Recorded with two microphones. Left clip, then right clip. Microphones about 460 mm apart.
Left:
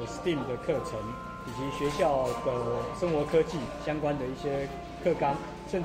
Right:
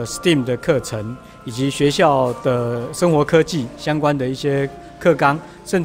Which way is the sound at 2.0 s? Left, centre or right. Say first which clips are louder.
Right 10 dB; right.